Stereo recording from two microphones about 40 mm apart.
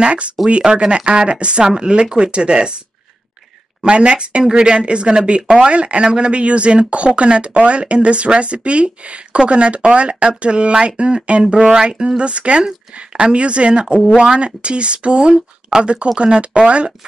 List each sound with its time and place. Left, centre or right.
0.0 s speech: right
3.8 s speech: right
12.2 s speech: right